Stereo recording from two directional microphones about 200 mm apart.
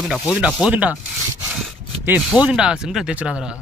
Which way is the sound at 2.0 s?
10° right (ahead or behind).